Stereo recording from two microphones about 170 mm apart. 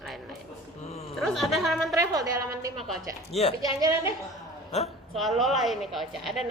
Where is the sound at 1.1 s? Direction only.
Centre (ahead or behind).